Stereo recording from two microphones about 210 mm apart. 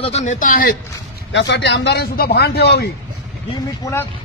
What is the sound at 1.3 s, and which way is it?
Speech, 55° left (ahead or behind).